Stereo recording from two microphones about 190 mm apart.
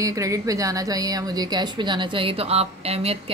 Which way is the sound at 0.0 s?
15° right (ahead or behind).